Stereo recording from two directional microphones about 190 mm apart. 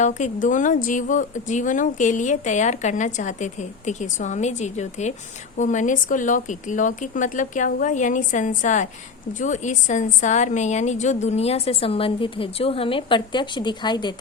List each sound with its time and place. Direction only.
0.0 s a woman's voice: 40° left (ahead or behind); by 14.2 s 20° left (ahead or behind)